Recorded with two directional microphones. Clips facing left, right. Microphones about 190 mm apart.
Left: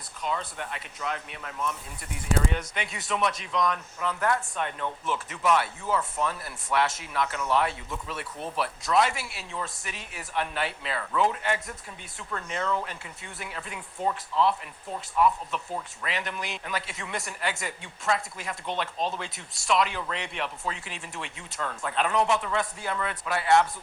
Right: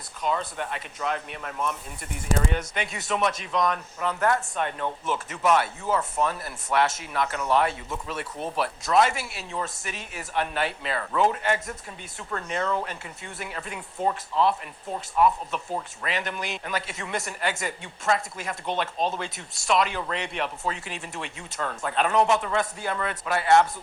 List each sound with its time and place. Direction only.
0.2 s speech: 45° right (ahead or behind)